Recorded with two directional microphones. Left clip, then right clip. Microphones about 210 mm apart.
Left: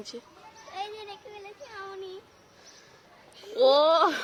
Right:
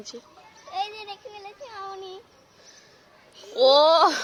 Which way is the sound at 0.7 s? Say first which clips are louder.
Right 6 dB; 35° right (ahead or behind).